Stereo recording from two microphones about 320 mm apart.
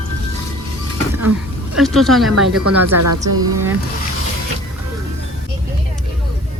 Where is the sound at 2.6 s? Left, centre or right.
Right.